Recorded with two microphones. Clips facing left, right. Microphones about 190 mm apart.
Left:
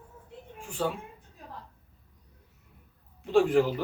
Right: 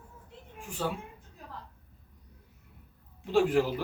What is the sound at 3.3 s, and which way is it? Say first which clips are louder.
Speech: left 3 dB; 5° right (ahead or behind).